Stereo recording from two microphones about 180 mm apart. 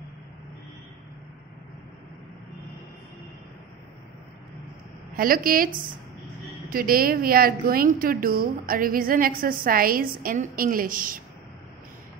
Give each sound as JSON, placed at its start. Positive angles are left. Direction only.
{"t": 5.1, "sound": "a woman's voice", "side_deg": -50}